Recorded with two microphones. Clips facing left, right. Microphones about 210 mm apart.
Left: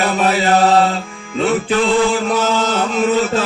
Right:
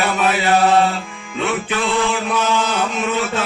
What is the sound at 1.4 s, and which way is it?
Chant, 35° left (ahead or behind).